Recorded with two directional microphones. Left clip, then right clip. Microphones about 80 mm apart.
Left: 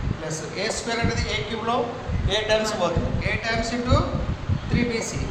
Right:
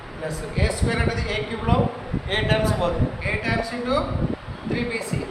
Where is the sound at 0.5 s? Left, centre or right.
Left.